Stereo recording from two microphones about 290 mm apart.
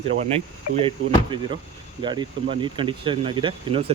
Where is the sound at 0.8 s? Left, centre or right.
Centre.